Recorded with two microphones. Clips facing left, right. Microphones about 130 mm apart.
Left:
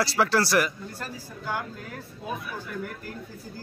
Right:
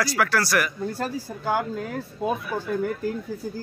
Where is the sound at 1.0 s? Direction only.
90° right.